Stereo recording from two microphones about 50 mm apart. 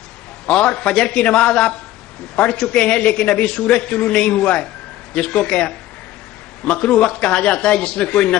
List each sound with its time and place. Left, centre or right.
0.5 s a man's voice: centre